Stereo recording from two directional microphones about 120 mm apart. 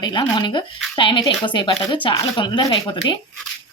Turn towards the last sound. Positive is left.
turn(degrees=40)  # may be behind; listen again after turning